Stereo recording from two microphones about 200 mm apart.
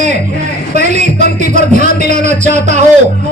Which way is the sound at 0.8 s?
35° right (ahead or behind).